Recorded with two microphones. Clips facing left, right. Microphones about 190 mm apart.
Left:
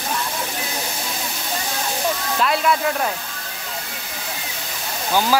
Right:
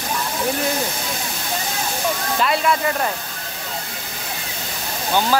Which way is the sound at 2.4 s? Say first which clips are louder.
Even; centre (ahead or behind).